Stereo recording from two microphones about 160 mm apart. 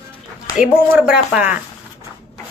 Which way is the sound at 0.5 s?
5° right (ahead or behind).